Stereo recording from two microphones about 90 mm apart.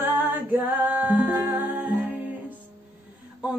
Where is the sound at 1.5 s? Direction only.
20° right (ahead or behind).